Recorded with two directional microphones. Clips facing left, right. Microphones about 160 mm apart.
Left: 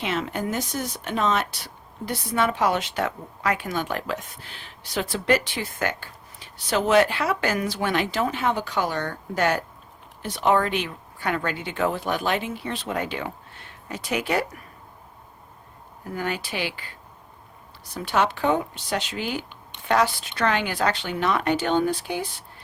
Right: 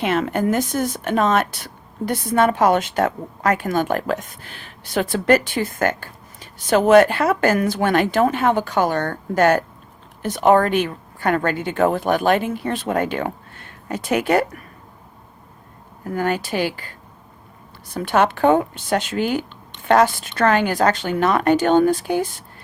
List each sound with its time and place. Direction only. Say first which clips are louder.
0.0 s speech: right 7 dB; 55° right (ahead or behind)
16.1 s speech: right 7 dB; 50° right (ahead or behind)
17.9 s speech: right 5 dB; 55° right (ahead or behind)